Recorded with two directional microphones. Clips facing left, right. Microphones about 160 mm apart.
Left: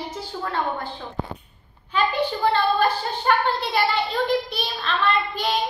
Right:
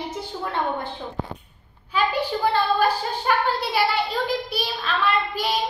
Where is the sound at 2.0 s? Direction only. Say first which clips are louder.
Even; 10° right (ahead or behind).